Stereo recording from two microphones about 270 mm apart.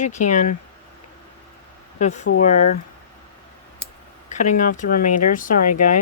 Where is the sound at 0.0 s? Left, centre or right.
Left.